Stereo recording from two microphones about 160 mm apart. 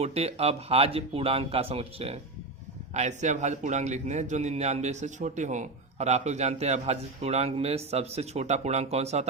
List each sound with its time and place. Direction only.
0.0 s a man's voice: 40° right (ahead or behind)